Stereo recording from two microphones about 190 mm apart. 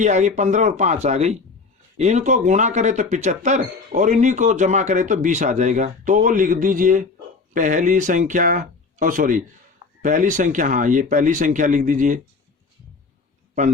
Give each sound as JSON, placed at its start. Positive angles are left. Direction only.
{"t": 0.0, "sound": "speech", "side_deg": -40}